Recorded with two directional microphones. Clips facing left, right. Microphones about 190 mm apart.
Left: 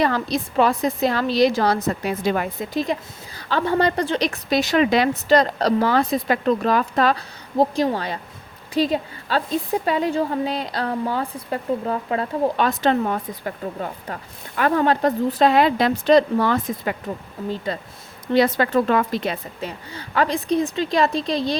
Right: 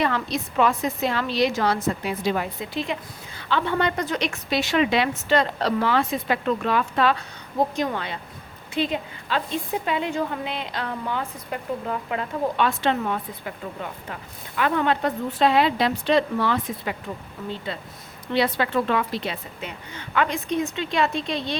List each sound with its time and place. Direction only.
0.0 s a woman's voice: 35° left (ahead or behind)
19.9 s a woman's voice: 35° left (ahead or behind)